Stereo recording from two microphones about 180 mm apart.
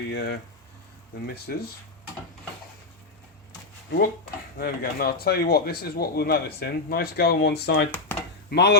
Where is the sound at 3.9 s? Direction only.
60° left (ahead or behind).